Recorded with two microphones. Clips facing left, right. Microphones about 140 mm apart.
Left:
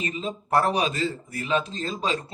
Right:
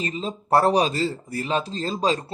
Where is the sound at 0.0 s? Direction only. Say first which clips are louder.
Right 2 dB; 35° right (ahead or behind).